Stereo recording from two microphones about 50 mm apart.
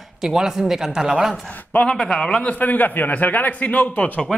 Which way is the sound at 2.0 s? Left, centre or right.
Centre.